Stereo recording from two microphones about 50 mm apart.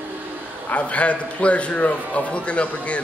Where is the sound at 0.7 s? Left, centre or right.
Left.